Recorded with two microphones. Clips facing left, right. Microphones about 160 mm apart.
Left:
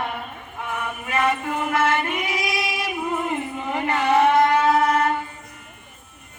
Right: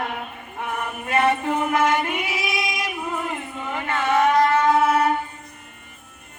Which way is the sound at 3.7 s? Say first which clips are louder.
Left 2 dB; 35° left (ahead or behind).